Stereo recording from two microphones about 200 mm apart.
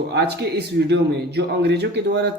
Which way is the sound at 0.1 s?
55° right (ahead or behind).